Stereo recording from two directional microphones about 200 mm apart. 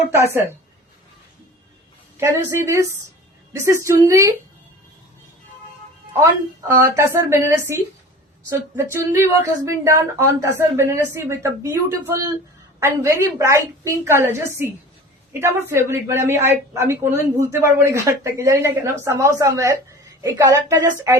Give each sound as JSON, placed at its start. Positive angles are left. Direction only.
{"t": 2.1, "sound": "speech", "side_deg": -15}
{"t": 6.7, "sound": "speech", "side_deg": -15}